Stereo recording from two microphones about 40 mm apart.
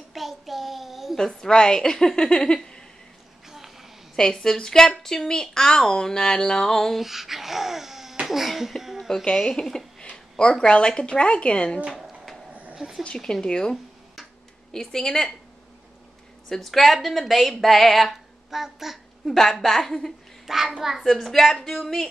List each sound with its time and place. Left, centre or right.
0.1 s child singing: centre
1.1 s speech: centre
3.4 s a sound: centre
4.2 s speech: centre
7.0 s babbling: centre
8.3 s speech: centre
9.3 s a woman's voice: centre
11.8 s speech: centre
13.2 s speech: centre
16.4 s speech: centre
19.3 s speech: centre
20.4 s a child's voice: centre
21.0 s speech: centre